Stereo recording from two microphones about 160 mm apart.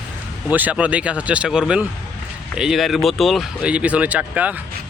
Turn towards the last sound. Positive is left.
turn(degrees=-10)  # may be behind; listen again after turning